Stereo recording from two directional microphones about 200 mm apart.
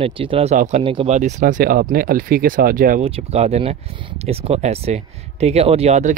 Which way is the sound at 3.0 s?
30° right (ahead or behind).